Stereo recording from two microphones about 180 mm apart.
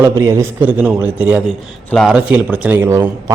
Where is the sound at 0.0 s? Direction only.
15° right (ahead or behind).